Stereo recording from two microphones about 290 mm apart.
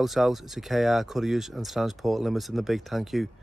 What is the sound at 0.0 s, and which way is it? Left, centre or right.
Speech, centre.